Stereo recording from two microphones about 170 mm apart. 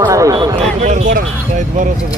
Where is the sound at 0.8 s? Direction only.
45° right (ahead or behind).